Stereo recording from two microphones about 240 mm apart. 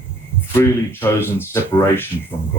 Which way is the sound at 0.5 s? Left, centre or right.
Centre.